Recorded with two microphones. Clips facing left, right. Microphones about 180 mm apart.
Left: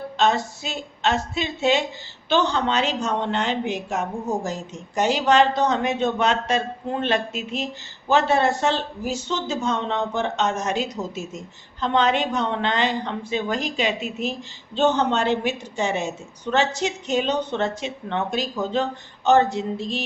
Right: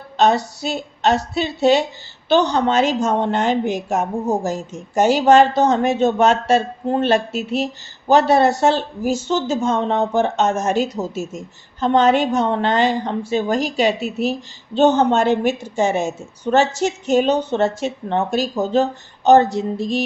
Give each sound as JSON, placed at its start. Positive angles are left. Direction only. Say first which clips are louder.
{"t": 0.2, "sound": "a woman's voice", "louder": "right 5 dB", "side_deg": -40}